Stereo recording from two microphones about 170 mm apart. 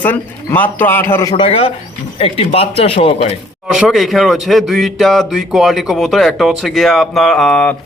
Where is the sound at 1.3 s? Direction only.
35° left (ahead or behind).